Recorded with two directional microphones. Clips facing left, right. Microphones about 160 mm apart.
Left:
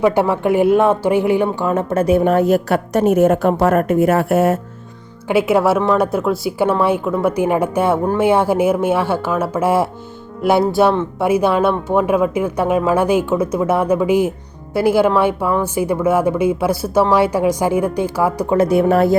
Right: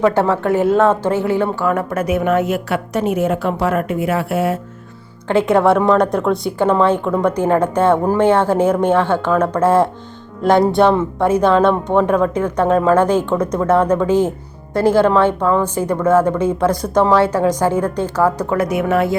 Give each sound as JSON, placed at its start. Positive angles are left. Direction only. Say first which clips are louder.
{"t": 0.0, "sound": "a woman's voice", "louder": "even", "side_deg": 15}
{"t": 5.3, "sound": "speech", "louder": "right 1 dB", "side_deg": 10}
{"t": 18.5, "sound": "a woman's voice", "louder": "left 3 dB", "side_deg": 30}